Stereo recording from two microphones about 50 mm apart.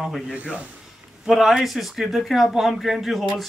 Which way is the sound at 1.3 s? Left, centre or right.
Centre.